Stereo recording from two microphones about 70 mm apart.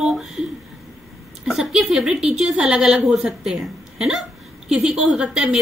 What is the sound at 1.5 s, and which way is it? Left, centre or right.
A woman's voice, centre.